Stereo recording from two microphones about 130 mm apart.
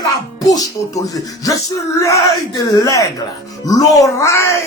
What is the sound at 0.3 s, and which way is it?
Speech, 25° left (ahead or behind).